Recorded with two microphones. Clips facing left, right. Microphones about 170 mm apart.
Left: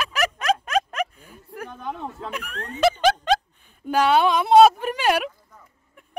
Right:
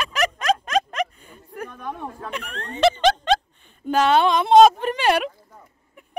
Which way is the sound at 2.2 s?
10° left (ahead or behind).